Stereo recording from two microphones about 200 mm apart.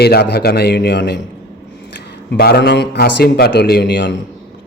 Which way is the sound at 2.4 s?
50° left (ahead or behind).